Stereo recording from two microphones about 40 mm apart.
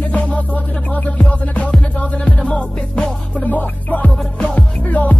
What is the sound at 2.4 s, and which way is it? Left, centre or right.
Music, left.